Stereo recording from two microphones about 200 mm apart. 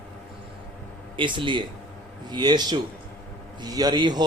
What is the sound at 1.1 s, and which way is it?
A man's voice, 25° right (ahead or behind).